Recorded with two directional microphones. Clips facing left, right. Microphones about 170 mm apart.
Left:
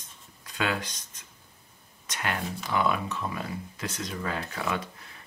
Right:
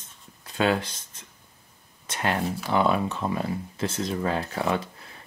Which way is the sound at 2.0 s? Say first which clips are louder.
Right 5 dB; 30° right (ahead or behind).